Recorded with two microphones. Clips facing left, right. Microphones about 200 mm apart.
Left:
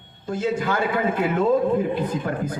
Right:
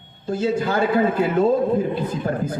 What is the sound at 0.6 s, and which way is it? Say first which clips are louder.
Speech: right 3 dB; 25° right (ahead or behind).